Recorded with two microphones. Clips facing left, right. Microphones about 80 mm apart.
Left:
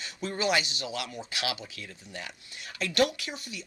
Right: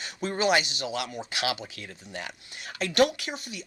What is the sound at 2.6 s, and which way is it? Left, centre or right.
Speech, right.